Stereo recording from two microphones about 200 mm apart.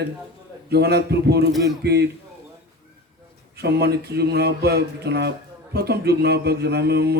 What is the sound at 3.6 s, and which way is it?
A man's voice, 55° right (ahead or behind).